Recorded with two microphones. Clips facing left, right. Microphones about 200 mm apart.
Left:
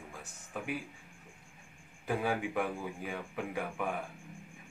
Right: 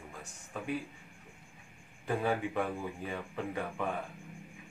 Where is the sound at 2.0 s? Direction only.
5° left (ahead or behind).